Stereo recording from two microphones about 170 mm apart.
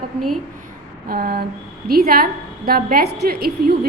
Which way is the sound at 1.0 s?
60° right (ahead or behind).